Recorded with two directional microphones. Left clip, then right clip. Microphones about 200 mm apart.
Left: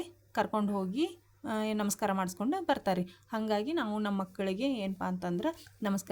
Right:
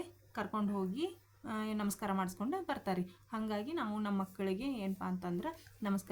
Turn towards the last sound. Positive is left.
turn(degrees=35)  # may be behind; listen again after turning